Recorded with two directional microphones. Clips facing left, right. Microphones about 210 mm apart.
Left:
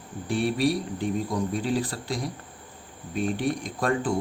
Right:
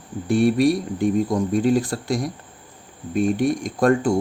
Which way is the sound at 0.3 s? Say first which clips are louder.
Right 7 dB; 45° right (ahead or behind).